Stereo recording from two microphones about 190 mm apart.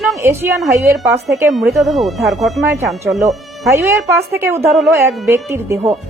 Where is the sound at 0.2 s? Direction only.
15° right (ahead or behind).